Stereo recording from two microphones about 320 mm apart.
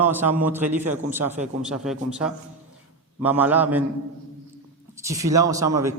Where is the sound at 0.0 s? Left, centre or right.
Centre.